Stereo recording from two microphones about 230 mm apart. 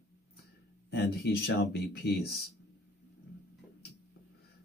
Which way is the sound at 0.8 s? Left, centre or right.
Left.